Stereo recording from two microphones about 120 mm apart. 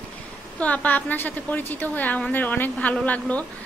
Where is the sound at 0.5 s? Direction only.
10° left (ahead or behind).